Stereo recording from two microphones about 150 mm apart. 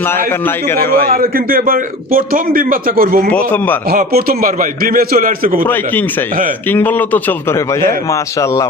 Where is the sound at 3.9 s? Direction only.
90° right; by 5.6 s 65° right (ahead or behind).